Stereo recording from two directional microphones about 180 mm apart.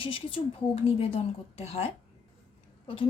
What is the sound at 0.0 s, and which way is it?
A woman's voice, 30° left (ahead or behind).